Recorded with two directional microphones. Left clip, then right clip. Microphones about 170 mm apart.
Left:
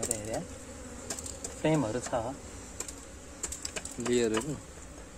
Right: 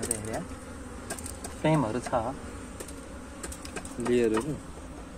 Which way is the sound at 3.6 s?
30° left (ahead or behind).